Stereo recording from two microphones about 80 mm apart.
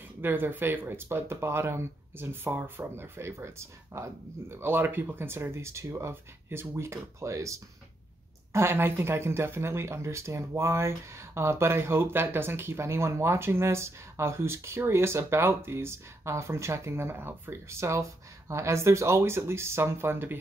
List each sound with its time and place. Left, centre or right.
0.2 s speech: right